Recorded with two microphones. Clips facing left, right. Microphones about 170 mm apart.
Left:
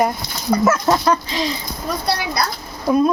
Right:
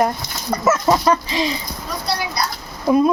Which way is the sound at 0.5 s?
5° right (ahead or behind).